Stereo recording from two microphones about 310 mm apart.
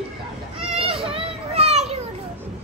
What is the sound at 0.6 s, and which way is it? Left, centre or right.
Children playing, centre.